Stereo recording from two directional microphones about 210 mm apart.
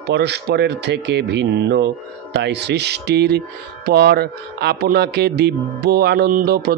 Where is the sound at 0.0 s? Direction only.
55° right (ahead or behind).